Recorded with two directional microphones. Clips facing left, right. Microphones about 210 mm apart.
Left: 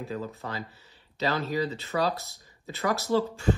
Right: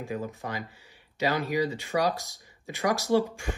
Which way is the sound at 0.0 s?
15° right (ahead or behind).